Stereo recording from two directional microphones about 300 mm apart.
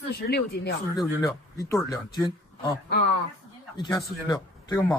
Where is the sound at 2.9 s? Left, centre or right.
Left.